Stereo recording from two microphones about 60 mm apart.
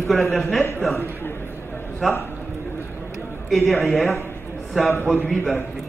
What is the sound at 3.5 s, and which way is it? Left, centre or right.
A man's voice, centre.